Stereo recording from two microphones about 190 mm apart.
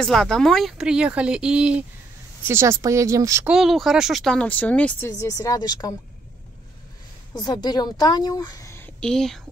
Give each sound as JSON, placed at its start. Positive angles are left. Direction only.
{"t": 0.0, "sound": "speech", "side_deg": 5}
{"t": 3.5, "sound": "speech", "side_deg": 0}
{"t": 7.3, "sound": "a woman's voice", "side_deg": 20}